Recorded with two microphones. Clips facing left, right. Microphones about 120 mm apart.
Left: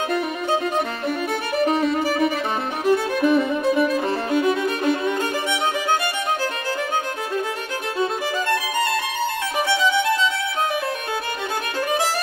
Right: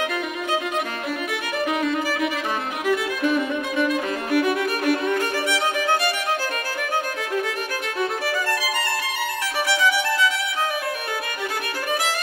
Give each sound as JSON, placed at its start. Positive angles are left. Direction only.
{"t": 1.6, "sound": "music", "side_deg": 35}
{"t": 9.8, "sound": "music", "side_deg": 20}